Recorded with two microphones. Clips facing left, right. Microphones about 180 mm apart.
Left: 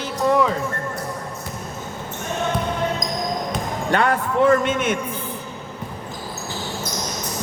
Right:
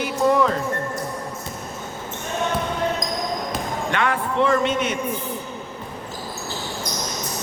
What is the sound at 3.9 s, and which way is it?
A man's voice, 40° left (ahead or behind).